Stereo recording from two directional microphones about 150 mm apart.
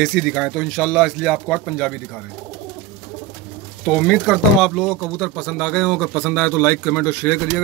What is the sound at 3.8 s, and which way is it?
Speech, 10° left (ahead or behind).